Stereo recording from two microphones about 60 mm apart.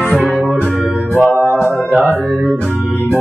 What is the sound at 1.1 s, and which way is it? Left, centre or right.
Music, right.